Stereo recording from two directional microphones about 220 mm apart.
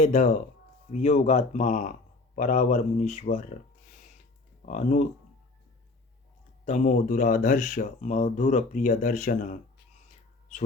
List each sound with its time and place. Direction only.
0.0 s speech: 35° left (ahead or behind)
4.6 s speech: 35° left (ahead or behind)
6.7 s speech: 35° left (ahead or behind)